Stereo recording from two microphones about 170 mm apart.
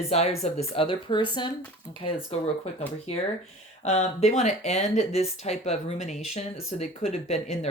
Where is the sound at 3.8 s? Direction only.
40° left (ahead or behind).